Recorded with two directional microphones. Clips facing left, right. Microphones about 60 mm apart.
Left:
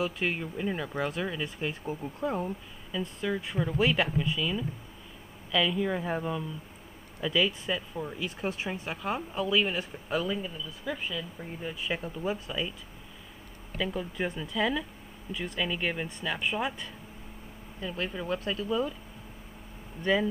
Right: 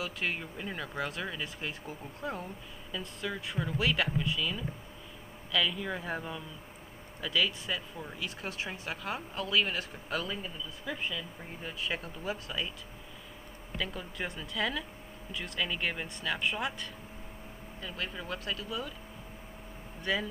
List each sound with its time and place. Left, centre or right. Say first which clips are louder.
0.0 s speech: left 5 dB; centre
2.9 s speech: left 6 dB; centre
5.7 s speech: left 6 dB; centre
10.3 s speech: left 5 dB; centre
11.8 s speech: left 3 dB; centre
13.7 s speech: left 5 dB; centre; by 18.9 s left
20.0 s speech: left 6 dB; left